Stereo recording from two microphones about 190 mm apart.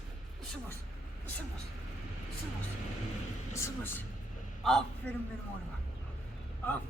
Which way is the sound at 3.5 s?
15° left (ahead or behind).